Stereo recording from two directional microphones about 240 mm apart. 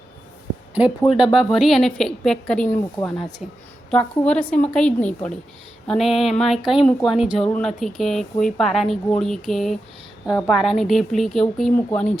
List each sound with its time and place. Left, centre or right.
0.7 s speech: centre